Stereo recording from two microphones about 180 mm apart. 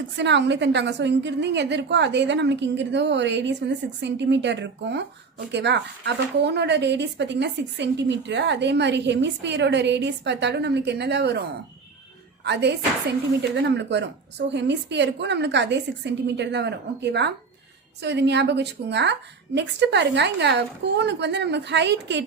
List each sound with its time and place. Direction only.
0.2 s speech: 75° right (ahead or behind)
12.5 s speech: 70° right (ahead or behind)